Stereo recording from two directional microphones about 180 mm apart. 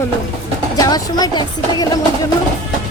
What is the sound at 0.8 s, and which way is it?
A woman's voice, 20° left (ahead or behind).